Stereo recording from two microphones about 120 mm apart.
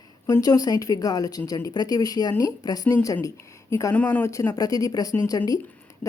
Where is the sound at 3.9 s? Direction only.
15° left (ahead or behind).